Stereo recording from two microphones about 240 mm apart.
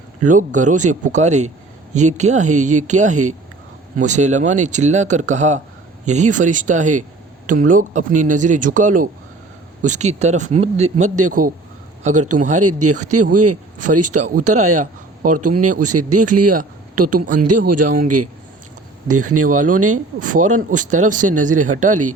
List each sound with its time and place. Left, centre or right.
0.2 s speech: right
10.9 s a man's voice: right
12.0 s speech: right
12.5 s a man's voice: right
14.1 s a man's voice: right
15.4 s a man's voice: right
19.0 s a man's voice: right
20.1 s speech: right